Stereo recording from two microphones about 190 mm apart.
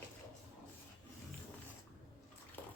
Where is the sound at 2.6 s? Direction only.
10° left (ahead or behind).